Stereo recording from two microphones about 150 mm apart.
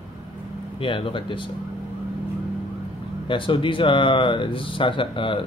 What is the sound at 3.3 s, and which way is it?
Speech, 35° left (ahead or behind).